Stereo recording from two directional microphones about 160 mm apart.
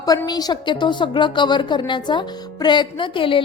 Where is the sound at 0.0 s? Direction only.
25° left (ahead or behind).